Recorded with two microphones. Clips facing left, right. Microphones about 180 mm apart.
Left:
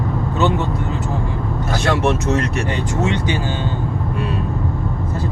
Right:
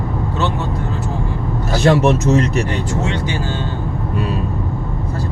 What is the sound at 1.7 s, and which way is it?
Speech, 35° right (ahead or behind).